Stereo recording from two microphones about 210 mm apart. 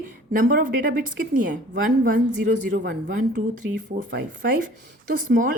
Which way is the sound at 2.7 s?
55° right (ahead or behind).